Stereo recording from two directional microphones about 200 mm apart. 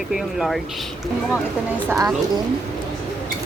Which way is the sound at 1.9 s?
15° right (ahead or behind).